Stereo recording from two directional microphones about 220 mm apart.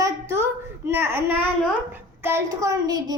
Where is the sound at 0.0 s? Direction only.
10° right (ahead or behind).